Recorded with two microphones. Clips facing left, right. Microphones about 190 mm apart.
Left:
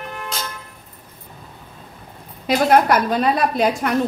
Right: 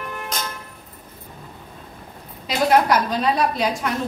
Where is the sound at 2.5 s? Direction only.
55° left (ahead or behind).